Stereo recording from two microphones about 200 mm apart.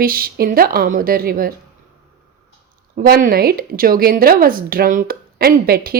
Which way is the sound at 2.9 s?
45° right (ahead or behind).